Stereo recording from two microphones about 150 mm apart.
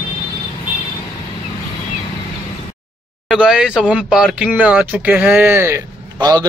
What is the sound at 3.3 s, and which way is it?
Speech, 5° right (ahead or behind).